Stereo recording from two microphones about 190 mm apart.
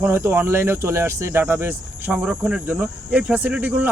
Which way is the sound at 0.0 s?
10° right (ahead or behind).